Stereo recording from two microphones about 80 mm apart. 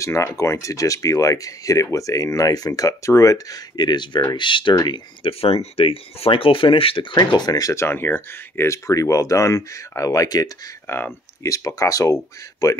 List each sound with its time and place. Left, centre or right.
0.0 s speech: left
4.4 s speech: left
7.7 s speech: left
10.9 s speech: left